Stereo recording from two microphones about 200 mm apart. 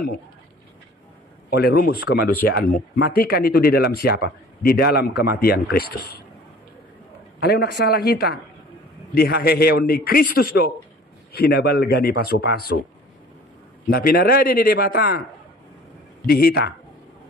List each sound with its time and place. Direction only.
1.5 s speech: 50° left (ahead or behind)
7.3 s speech: 50° left (ahead or behind)
13.8 s speech: 50° left (ahead or behind)
16.3 s speech: 50° left (ahead or behind)